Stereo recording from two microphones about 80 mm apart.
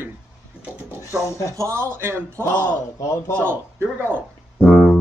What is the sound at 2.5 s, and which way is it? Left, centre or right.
Speech, left.